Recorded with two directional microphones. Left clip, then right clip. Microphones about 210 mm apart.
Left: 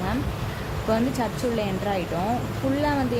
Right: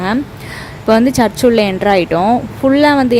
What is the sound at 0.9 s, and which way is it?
Speech, 45° right (ahead or behind).